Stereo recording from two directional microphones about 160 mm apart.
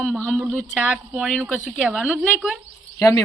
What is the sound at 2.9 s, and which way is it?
Speech, 20° left (ahead or behind).